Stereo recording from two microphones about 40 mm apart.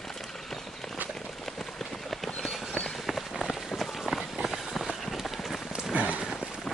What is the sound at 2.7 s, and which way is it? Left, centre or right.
Run, left.